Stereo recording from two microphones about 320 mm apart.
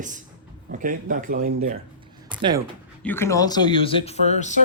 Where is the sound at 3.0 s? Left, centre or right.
Centre.